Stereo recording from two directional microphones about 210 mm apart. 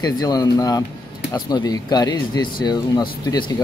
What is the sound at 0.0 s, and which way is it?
Speech, 20° left (ahead or behind).